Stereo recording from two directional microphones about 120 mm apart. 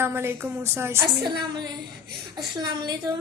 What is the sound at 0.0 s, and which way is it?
A woman's voice, 20° right (ahead or behind).